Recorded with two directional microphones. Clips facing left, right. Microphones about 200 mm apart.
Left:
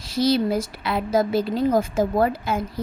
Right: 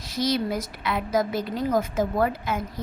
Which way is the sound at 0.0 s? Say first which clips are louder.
Left 5 dB; 30° left (ahead or behind).